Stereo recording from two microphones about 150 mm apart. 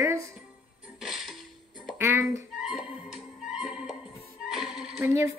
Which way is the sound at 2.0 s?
15° right (ahead or behind).